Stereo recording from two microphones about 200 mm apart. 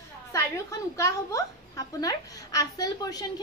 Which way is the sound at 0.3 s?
15° left (ahead or behind).